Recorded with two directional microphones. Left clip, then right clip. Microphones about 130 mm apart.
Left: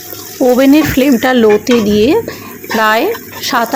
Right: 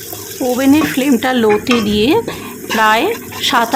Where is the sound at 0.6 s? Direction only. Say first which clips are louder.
Even; 25° left (ahead or behind).